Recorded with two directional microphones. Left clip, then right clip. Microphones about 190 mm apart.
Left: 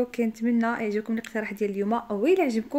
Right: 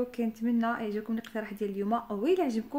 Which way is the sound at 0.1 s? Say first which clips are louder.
Left 5 dB; 20° left (ahead or behind).